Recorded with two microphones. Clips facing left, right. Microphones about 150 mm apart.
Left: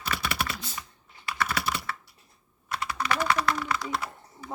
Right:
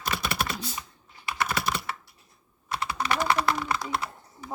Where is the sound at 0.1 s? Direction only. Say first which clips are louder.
Right 1 dB; 35° right (ahead or behind).